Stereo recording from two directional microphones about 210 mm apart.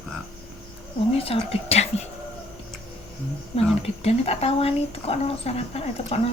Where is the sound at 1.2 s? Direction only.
30° left (ahead or behind).